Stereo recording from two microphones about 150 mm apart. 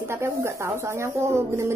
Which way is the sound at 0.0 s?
15° right (ahead or behind).